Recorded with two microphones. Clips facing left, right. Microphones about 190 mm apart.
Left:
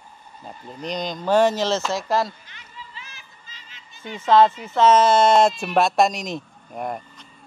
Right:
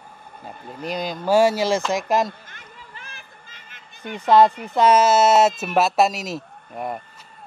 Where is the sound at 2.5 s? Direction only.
50° right (ahead or behind).